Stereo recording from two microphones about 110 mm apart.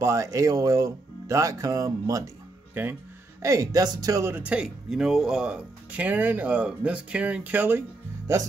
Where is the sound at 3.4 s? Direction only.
30° right (ahead or behind).